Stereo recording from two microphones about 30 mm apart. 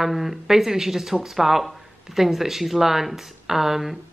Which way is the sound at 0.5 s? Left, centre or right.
Centre.